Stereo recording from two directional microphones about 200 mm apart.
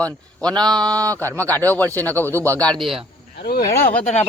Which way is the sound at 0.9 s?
15° right (ahead or behind).